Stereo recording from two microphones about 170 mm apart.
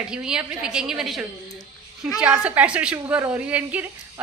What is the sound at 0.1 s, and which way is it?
A woman's voice, 5° right (ahead or behind).